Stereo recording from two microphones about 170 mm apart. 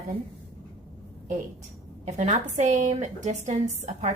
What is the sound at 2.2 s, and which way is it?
A woman's voice, 45° right (ahead or behind).